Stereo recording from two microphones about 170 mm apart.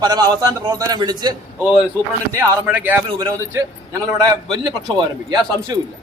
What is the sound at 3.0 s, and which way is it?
A man's voice, 25° right (ahead or behind).